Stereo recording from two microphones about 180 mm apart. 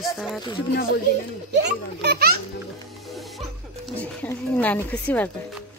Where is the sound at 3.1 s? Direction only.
Centre (ahead or behind).